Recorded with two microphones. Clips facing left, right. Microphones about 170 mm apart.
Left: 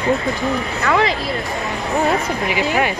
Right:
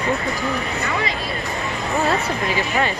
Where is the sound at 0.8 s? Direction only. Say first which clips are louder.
Left 11 dB; 90° left.